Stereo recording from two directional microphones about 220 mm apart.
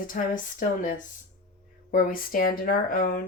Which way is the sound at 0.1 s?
35° left (ahead or behind).